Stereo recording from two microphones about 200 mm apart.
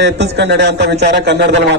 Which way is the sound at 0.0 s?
60° right (ahead or behind).